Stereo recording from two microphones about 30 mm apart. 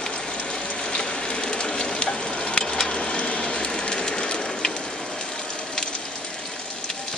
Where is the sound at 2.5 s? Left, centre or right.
Left.